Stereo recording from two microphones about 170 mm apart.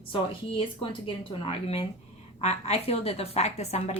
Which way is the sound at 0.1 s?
30° left (ahead or behind).